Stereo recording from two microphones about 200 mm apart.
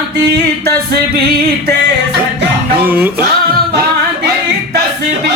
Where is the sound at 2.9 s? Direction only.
10° right (ahead or behind).